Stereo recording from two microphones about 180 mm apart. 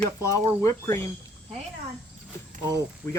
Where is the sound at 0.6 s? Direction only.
15° left (ahead or behind).